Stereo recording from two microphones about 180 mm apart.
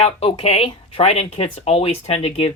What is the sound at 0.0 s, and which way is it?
Speech, 35° left (ahead or behind).